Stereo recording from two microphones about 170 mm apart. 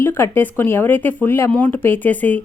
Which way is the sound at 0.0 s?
10° left (ahead or behind).